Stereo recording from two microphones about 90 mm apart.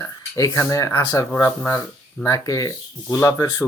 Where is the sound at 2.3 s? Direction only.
35° left (ahead or behind).